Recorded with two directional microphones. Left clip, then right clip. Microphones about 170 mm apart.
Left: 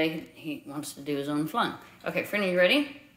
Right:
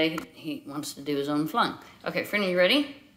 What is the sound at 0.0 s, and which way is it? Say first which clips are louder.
Speech: right 2 dB; 10° right (ahead or behind).